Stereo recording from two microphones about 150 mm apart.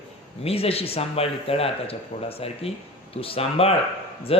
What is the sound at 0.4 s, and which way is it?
Speech, 40° left (ahead or behind).